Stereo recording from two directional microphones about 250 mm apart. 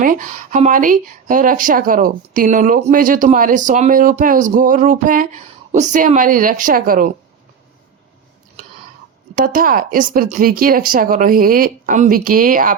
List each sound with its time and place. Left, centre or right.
0.0 s speech: right
9.3 s speech: right